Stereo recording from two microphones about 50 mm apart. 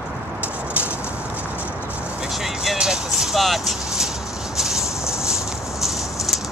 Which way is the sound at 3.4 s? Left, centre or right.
Centre.